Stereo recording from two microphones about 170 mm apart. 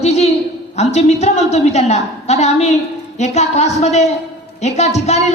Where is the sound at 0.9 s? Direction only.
40° left (ahead or behind).